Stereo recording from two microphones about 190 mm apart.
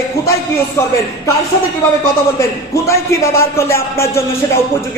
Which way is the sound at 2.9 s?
15° left (ahead or behind).